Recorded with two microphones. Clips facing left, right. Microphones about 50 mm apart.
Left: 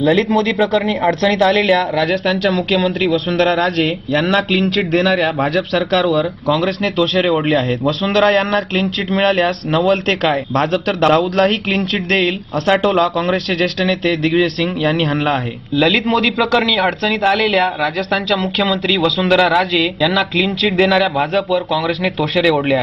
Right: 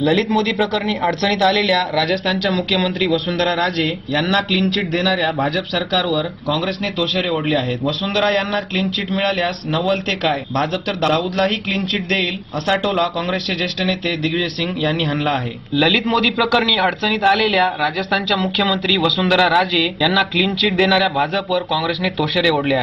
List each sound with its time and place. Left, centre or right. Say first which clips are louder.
0.0 s speech: left 3 dB; centre
2.8 s a man's voice: left 2 dB; centre
3.3 s a man's voice: left 4 dB; left
6.6 s a man's voice: left 5 dB; left
13.8 s a man's voice: left 4 dB; left
15.1 s a man's voice: left 2 dB; centre